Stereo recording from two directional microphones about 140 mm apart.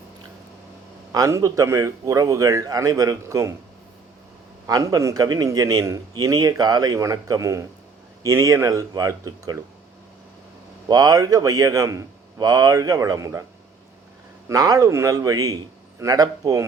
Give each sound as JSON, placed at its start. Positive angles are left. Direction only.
{"t": 1.1, "sound": "a man's voice", "side_deg": -25}
{"t": 4.6, "sound": "a man's voice", "side_deg": -25}
{"t": 10.8, "sound": "a man's voice", "side_deg": -25}
{"t": 14.4, "sound": "a man's voice", "side_deg": -25}